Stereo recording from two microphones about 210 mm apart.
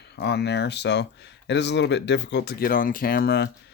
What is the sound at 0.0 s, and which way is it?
Speech, 55° left (ahead or behind).